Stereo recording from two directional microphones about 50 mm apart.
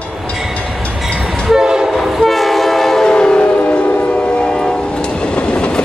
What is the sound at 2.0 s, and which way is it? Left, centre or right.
Train, centre.